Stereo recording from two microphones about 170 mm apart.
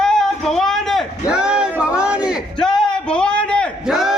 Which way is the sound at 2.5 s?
5° left (ahead or behind).